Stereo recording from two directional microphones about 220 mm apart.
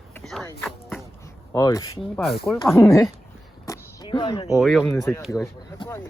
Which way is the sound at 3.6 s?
15° left (ahead or behind).